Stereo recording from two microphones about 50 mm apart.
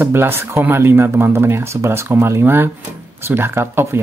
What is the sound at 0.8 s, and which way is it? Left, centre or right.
Speech, right.